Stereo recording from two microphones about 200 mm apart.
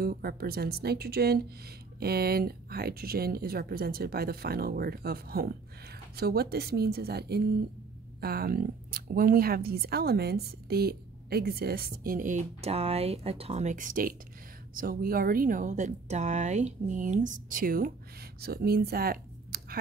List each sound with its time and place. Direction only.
0.0 s a woman's voice: 50° right (ahead or behind)